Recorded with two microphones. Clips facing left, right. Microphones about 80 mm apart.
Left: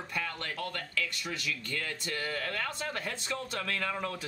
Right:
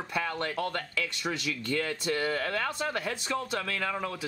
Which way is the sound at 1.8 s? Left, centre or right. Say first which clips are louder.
Right 7 dB; right.